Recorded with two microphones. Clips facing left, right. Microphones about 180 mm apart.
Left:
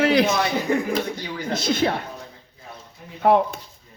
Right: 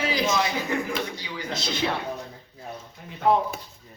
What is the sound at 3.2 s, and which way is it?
Speech, 65° left (ahead or behind).